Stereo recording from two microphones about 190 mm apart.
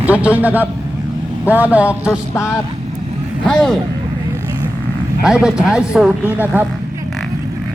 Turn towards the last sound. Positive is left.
turn(degrees=-10)  # may be behind; listen again after turning